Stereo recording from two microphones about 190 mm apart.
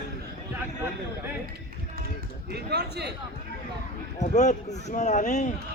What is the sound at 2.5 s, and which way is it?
Speech, 60° right (ahead or behind).